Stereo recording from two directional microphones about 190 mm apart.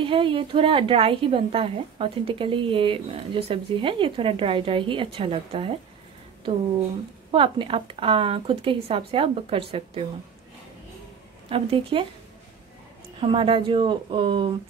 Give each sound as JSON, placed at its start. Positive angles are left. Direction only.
{"t": 0.0, "sound": "speech", "side_deg": -25}
{"t": 7.2, "sound": "speech", "side_deg": -30}
{"t": 11.4, "sound": "speech", "side_deg": -30}
{"t": 13.2, "sound": "speech", "side_deg": -25}